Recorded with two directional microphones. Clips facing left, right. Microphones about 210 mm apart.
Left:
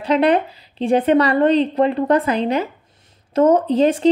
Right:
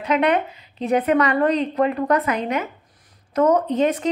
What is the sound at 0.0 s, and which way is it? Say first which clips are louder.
A woman's voice: left 3 dB; 35° left (ahead or behind).